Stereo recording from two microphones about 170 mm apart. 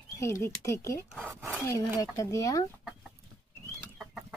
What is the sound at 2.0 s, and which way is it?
Speech, 20° left (ahead or behind).